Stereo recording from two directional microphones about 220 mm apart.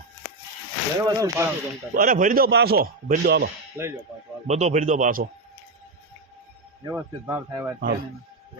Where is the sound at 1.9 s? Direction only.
40° right (ahead or behind).